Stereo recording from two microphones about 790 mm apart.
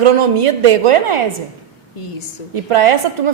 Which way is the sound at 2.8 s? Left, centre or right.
Right.